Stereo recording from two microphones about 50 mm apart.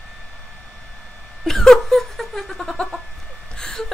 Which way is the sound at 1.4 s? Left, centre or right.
Centre.